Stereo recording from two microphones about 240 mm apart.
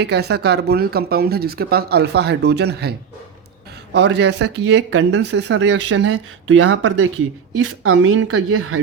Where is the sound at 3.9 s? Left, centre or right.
Right.